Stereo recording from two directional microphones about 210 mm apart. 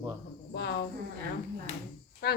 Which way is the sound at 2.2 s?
50° left (ahead or behind).